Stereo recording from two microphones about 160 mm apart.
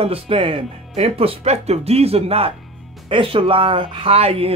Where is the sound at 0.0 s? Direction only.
35° right (ahead or behind).